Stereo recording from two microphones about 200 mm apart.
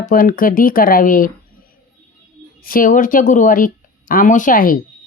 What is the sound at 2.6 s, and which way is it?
Speech, 45° left (ahead or behind).